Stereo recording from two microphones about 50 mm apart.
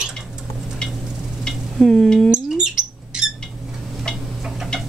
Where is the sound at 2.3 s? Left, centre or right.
Centre.